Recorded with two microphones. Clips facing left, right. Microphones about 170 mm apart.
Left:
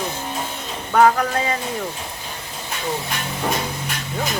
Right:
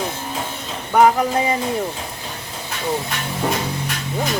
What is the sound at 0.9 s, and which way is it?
Speech, 20° right (ahead or behind).